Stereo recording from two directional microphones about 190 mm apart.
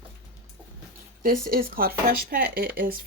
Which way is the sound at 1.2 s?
50° right (ahead or behind).